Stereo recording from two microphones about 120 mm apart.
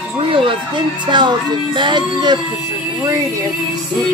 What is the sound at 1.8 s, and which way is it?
Music, 40° right (ahead or behind).